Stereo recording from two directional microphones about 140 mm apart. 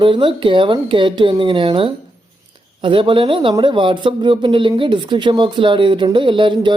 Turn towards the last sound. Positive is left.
turn(degrees=-35)  # may be behind; listen again after turning